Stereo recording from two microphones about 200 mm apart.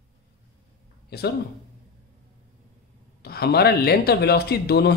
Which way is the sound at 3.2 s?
50° left (ahead or behind).